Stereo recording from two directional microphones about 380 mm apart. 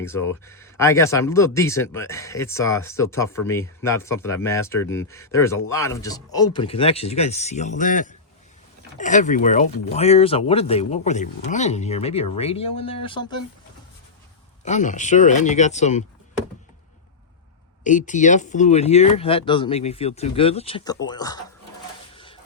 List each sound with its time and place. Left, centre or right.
0.0 s speech: centre
14.6 s speech: centre
17.8 s speech: centre
22.1 s a sound: centre